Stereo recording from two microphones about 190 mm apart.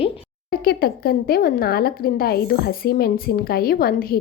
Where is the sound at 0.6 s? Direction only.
55° left (ahead or behind).